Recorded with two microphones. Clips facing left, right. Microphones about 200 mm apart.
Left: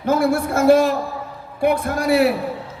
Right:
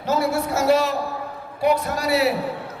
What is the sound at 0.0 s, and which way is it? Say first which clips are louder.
A man's voice: left 4 dB; 50° left (ahead or behind).